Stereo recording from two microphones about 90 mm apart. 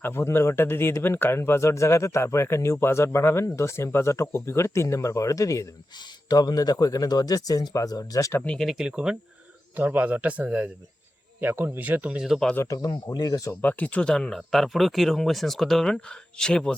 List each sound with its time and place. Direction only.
0.0 s speech: 25° left (ahead or behind); by 8.3 s 45° left (ahead or behind)
8.4 s speech: 5° left (ahead or behind)
9.7 s speech: 15° right (ahead or behind)
12.6 s speech: 45° left (ahead or behind)
13.6 s speech: 20° left (ahead or behind)